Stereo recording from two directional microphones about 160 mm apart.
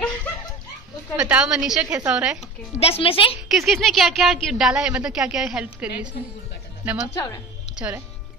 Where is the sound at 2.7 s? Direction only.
40° left (ahead or behind).